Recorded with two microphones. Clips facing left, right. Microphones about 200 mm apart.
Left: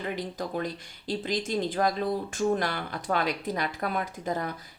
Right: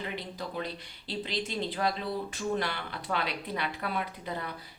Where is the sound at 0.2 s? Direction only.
45° left (ahead or behind).